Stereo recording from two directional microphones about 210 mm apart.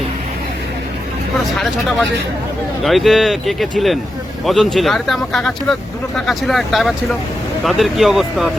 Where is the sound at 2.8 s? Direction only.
Centre (ahead or behind).